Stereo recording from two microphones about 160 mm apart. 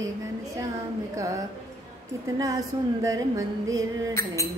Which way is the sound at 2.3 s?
20° right (ahead or behind).